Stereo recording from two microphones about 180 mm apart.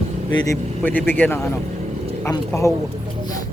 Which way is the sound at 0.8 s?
10° left (ahead or behind).